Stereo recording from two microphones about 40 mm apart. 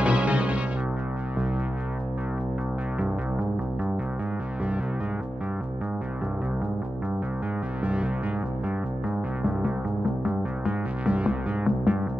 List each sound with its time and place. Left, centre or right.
0.0 s music: right
7.8 s music: right
9.4 s music: right